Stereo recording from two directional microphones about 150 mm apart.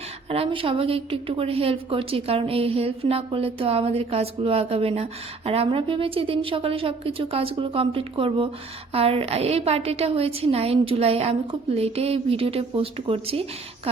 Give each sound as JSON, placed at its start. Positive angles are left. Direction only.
{"t": 0.3, "sound": "a woman's voice", "side_deg": -40}